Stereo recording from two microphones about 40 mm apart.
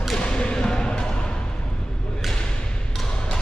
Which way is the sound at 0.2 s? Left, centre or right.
Left.